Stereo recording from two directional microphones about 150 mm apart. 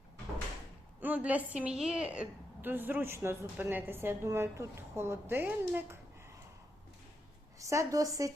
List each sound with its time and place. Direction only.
0.9 s a woman's voice: 10° right (ahead or behind)
7.6 s a woman's voice: 20° right (ahead or behind)